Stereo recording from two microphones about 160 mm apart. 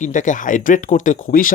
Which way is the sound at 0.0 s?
50° left (ahead or behind).